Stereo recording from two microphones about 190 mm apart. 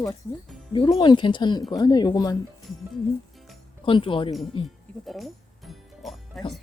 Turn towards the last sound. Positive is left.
turn(degrees=0)  # may be behind; listen again after turning